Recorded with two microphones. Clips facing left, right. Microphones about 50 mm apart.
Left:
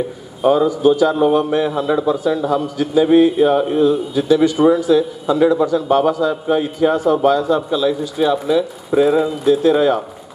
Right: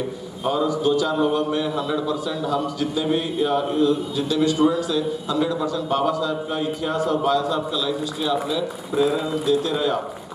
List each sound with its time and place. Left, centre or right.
0.4 s a man's voice: left